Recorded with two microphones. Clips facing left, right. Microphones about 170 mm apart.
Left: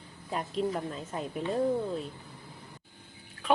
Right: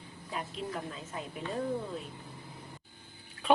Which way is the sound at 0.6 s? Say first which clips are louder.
Left 11 dB; 45° left (ahead or behind).